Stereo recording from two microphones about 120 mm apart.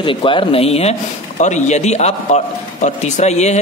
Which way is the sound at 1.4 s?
75° left (ahead or behind).